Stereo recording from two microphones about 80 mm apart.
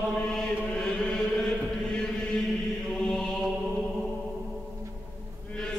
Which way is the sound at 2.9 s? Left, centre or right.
Centre.